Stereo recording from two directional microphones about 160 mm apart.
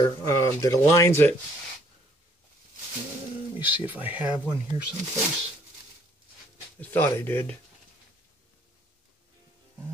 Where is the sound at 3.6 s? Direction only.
10° right (ahead or behind).